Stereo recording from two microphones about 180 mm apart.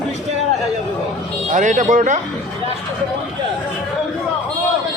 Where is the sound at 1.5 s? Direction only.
45° right (ahead or behind).